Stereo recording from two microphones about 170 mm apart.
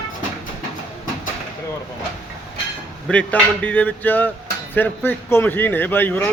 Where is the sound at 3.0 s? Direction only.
5° left (ahead or behind).